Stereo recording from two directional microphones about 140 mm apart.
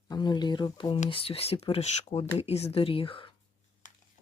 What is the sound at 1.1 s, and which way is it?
Speech, 45° left (ahead or behind).